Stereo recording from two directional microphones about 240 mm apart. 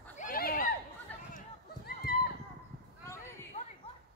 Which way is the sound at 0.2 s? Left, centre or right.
Left.